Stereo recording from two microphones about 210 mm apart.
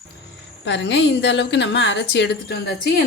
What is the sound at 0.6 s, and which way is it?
A woman's voice, 55° left (ahead or behind).